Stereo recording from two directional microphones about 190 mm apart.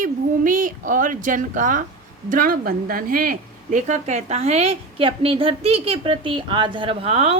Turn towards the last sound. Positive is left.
turn(degrees=-30)  # may be behind; listen again after turning